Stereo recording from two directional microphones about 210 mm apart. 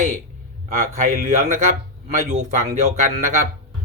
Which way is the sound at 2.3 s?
35° right (ahead or behind).